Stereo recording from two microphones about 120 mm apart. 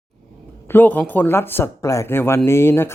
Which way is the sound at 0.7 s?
15° left (ahead or behind).